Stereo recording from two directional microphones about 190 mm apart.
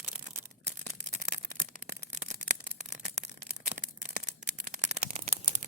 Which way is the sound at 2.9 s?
40° right (ahead or behind).